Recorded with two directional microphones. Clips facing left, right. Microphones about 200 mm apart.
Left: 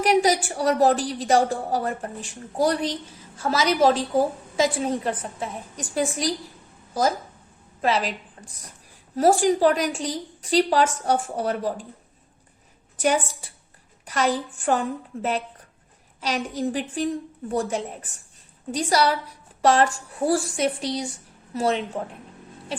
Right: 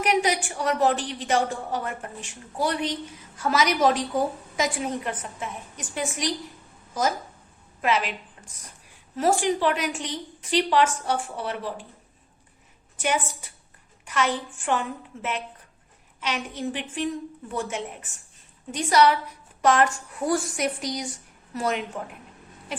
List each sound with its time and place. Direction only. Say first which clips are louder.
0.0 s a woman's voice: left 4 dB; 35° left (ahead or behind)
7.8 s a woman's voice: left 2 dB; 35° left (ahead or behind)
13.0 s a woman's voice: left 4 dB; 35° left (ahead or behind)